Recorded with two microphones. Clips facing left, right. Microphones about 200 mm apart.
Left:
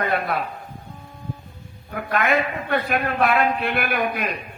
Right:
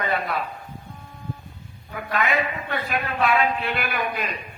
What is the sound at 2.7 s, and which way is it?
A man's voice, 50° left (ahead or behind).